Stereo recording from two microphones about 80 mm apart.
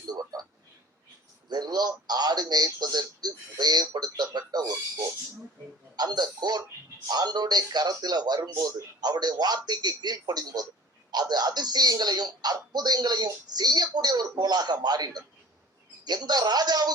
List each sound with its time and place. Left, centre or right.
1.5 s speech: right